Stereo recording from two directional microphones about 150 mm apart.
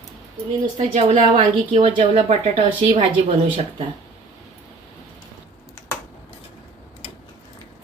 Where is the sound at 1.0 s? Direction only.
35° right (ahead or behind).